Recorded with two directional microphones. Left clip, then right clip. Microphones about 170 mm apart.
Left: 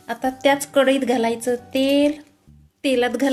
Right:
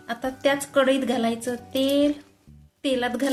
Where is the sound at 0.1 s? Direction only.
35° left (ahead or behind).